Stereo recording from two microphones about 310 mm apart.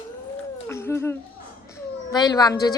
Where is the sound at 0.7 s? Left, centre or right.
Centre.